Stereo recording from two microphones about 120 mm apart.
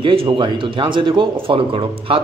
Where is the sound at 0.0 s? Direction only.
45° right (ahead or behind).